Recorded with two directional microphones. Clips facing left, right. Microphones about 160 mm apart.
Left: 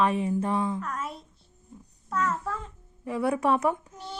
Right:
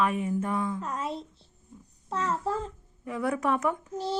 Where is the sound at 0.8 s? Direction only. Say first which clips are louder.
Right 2 dB; 25° right (ahead or behind).